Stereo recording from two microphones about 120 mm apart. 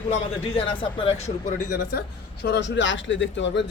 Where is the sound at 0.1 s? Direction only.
50° left (ahead or behind); by 1.6 s 75° left (ahead or behind).